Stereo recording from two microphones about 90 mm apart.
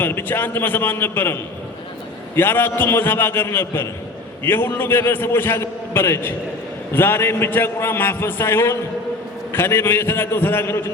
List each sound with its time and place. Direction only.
0.0 s a man's voice: 25° left (ahead or behind)